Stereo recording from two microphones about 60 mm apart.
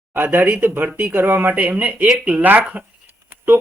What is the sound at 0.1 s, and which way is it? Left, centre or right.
A man's voice, right.